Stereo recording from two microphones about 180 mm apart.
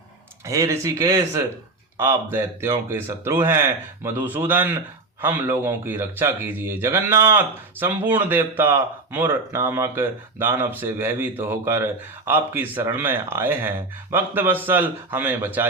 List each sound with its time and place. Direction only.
0.4 s speech: 15° right (ahead or behind)